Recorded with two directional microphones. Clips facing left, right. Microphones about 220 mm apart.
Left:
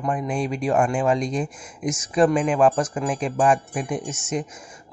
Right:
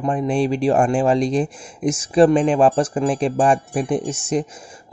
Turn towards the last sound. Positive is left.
turn(degrees=-30)  # may be behind; listen again after turning